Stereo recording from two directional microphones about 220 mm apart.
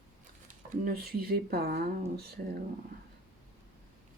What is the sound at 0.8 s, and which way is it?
Speech, 45° right (ahead or behind).